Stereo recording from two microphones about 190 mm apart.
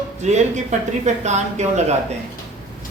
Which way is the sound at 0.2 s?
35° right (ahead or behind).